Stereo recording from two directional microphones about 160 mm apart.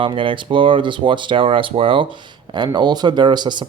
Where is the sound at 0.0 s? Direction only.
30° right (ahead or behind).